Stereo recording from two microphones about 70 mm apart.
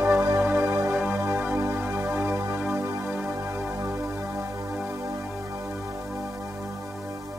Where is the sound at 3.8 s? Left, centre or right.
Right.